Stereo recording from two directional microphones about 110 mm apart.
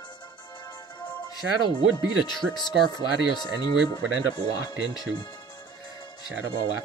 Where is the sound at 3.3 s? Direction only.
40° left (ahead or behind).